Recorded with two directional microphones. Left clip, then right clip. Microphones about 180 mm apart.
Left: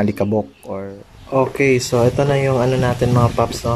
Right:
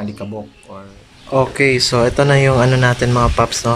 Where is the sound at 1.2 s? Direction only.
5° left (ahead or behind).